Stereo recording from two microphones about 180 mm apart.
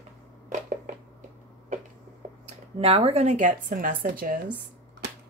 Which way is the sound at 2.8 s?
35° right (ahead or behind).